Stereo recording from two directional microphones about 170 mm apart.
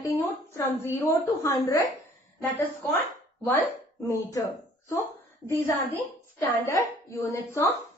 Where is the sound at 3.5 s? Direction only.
20° left (ahead or behind).